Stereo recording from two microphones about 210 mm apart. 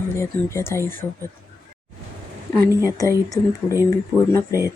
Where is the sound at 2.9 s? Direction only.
15° left (ahead or behind).